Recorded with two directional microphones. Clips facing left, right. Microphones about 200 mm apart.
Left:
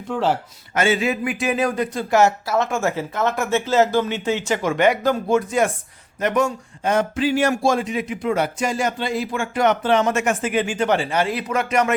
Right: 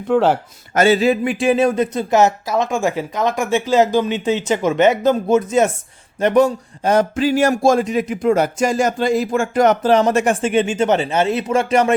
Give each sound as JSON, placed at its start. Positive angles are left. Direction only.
{"t": 0.1, "sound": "a man's voice", "side_deg": -60}
{"t": 0.7, "sound": "a man's voice", "side_deg": -40}